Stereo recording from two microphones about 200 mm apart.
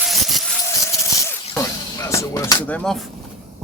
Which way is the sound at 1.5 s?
15° left (ahead or behind).